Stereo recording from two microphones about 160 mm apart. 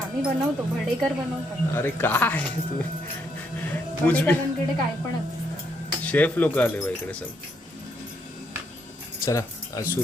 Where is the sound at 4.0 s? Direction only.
10° left (ahead or behind).